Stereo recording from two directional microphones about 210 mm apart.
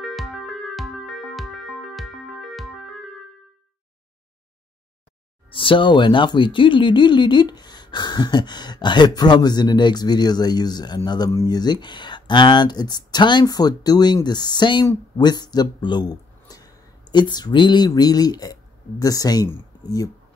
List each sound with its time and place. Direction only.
0.0 s music: centre (ahead or behind)
5.5 s speech: 25° left (ahead or behind)